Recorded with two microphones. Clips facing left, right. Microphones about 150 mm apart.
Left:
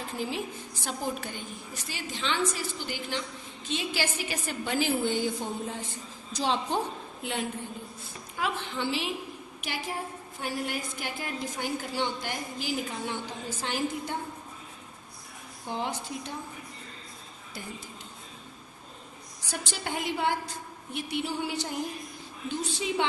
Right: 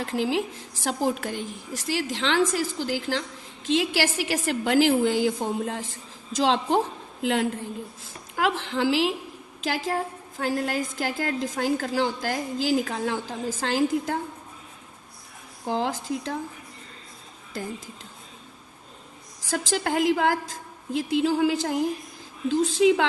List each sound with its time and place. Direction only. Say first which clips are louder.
0.0 s a woman's voice: right 8 dB; 90° right
15.6 s a woman's voice: right 6 dB; 90° right
17.5 s a woman's voice: right 9 dB; 90° right
19.4 s a woman's voice: right 10 dB; 90° right